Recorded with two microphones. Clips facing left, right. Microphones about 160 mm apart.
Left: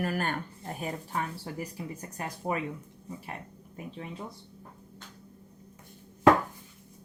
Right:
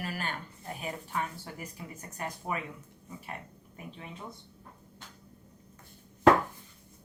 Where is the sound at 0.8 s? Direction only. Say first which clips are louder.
Left 2 dB; 35° left (ahead or behind).